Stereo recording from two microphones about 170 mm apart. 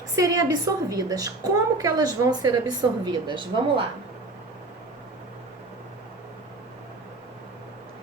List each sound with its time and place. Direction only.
0.2 s a woman's voice: 20° right (ahead or behind)